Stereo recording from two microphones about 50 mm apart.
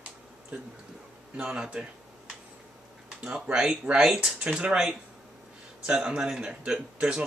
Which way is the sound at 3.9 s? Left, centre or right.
Right.